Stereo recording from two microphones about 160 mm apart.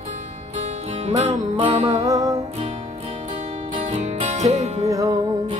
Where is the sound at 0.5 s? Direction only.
45° right (ahead or behind).